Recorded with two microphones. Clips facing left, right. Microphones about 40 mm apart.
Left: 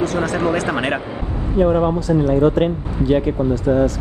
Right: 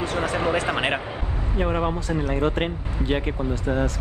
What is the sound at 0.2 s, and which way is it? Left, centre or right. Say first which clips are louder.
Speech: left 4 dB; centre.